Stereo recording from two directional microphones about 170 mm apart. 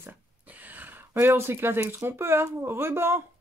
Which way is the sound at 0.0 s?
10° right (ahead or behind).